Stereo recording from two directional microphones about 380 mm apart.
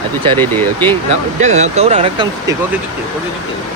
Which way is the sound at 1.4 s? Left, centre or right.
Centre.